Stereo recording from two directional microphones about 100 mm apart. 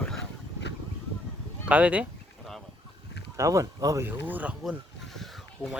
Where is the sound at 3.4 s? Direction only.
35° right (ahead or behind).